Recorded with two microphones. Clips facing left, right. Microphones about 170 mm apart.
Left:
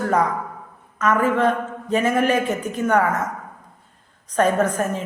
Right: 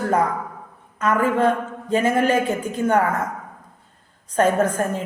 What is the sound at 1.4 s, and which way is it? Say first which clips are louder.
A man's voice: right 1 dB; 30° right (ahead or behind).